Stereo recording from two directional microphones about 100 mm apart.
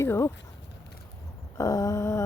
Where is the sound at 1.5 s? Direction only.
35° left (ahead or behind).